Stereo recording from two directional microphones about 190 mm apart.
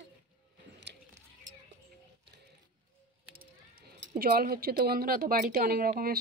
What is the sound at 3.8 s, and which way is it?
Speech, 50° right (ahead or behind).